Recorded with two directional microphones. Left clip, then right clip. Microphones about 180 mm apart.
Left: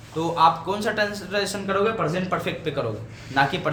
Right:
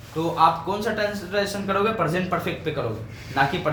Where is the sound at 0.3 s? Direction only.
40° left (ahead or behind).